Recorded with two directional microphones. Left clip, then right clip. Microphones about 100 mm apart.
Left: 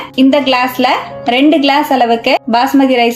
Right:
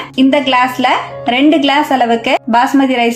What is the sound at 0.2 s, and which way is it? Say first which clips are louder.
A woman's voice: even; 20° left (ahead or behind).